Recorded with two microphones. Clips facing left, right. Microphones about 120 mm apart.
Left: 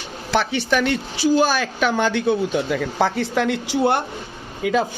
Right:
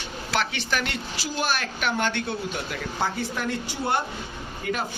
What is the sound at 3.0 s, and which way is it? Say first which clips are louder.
Speech: left 7 dB; 90° left.